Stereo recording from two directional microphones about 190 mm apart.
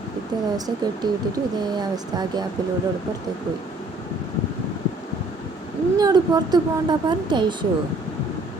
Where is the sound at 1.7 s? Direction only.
20° right (ahead or behind).